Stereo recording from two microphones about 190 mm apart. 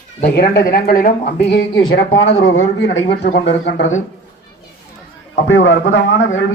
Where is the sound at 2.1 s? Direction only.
90° left.